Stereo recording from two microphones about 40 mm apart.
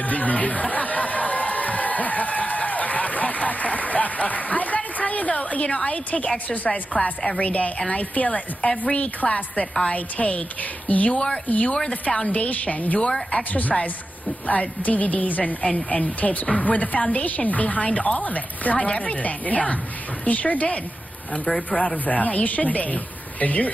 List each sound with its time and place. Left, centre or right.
0.0 s crowd: left
5.7 s a woman's voice: left